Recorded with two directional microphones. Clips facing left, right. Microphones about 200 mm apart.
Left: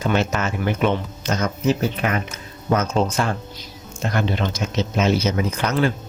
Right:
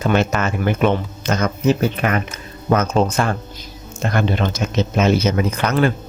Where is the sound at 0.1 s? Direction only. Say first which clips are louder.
Right 4 dB; 55° right (ahead or behind).